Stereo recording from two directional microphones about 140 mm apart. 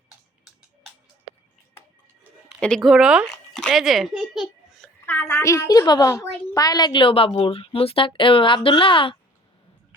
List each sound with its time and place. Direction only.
2.6 s a child's voice: 5° left (ahead or behind)
5.0 s a woman's voice: 15° left (ahead or behind); by 9.1 s 40° left (ahead or behind)